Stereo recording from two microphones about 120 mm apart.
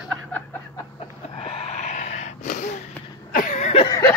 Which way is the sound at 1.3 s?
60° left (ahead or behind).